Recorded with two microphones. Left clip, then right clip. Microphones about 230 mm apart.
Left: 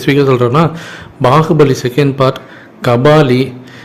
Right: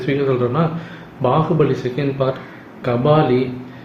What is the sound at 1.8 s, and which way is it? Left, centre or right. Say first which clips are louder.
Speech: left 9 dB; left.